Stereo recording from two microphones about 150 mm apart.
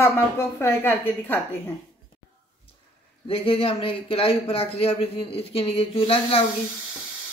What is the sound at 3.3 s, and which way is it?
Speech, 40° left (ahead or behind).